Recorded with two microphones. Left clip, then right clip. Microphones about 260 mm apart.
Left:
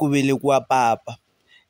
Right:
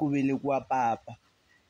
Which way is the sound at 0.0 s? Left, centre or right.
Left.